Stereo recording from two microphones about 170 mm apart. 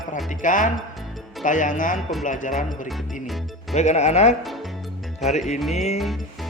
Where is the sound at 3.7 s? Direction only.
40° left (ahead or behind).